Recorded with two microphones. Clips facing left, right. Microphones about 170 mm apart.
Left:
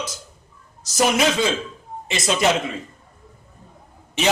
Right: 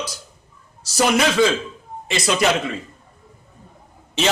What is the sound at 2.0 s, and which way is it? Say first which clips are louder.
Speech: right 2 dB; 20° left (ahead or behind).